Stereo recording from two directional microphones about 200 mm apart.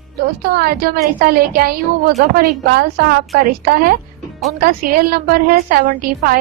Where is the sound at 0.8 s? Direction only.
50° right (ahead or behind).